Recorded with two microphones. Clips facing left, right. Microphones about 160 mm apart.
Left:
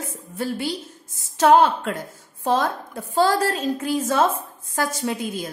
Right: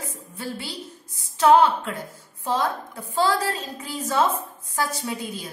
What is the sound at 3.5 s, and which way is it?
A woman's voice, 55° left (ahead or behind).